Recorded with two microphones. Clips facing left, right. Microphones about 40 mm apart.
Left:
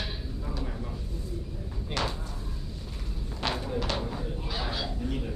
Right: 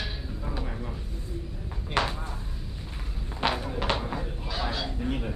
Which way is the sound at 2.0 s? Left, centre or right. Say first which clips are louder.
Right 5 dB; right.